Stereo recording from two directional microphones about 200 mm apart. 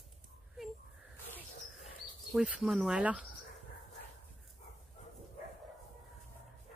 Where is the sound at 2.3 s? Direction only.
Centre (ahead or behind).